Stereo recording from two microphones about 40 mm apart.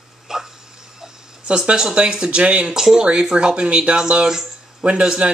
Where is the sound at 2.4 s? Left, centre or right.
Right.